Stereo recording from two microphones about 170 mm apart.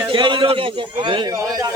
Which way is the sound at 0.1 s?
30° right (ahead or behind).